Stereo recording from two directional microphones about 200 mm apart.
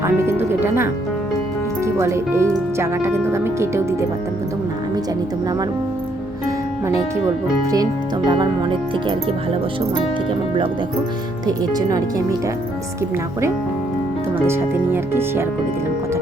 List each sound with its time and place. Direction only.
0.0 s music: 10° right (ahead or behind)
1.8 s speech: 15° right (ahead or behind)
8.3 s speech: 25° right (ahead or behind)
11.7 s speech: 20° right (ahead or behind)
14.4 s speech: 10° right (ahead or behind)